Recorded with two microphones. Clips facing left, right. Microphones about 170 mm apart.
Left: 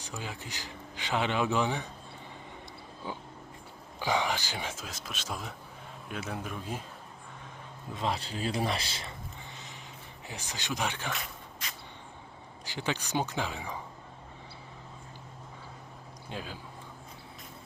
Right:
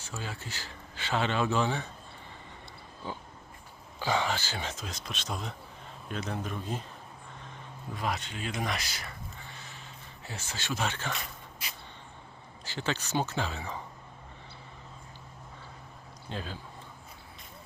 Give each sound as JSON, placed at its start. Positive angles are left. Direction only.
{"t": 0.0, "sound": "speech", "side_deg": 15}
{"t": 3.0, "sound": "speech", "side_deg": 10}
{"t": 7.9, "sound": "speech", "side_deg": 30}
{"t": 11.6, "sound": "vehicle", "side_deg": -10}
{"t": 12.6, "sound": "speech", "side_deg": 15}
{"t": 16.3, "sound": "speech", "side_deg": 10}